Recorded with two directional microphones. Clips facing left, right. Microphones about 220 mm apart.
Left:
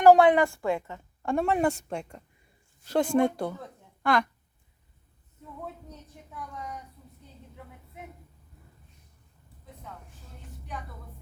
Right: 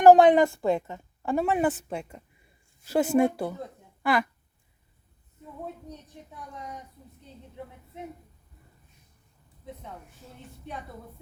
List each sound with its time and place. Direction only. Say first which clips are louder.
0.0 s a woman's voice: right 2 dB; 20° right (ahead or behind)
1.2 s a woman's voice: even; 5° right (ahead or behind)